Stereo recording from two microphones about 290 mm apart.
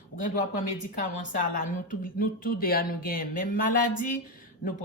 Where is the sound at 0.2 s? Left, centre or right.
Left.